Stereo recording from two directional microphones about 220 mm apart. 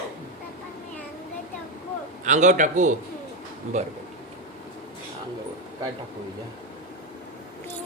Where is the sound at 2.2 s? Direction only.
35° right (ahead or behind).